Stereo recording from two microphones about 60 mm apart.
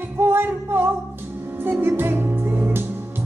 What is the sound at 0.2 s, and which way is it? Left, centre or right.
Music, right.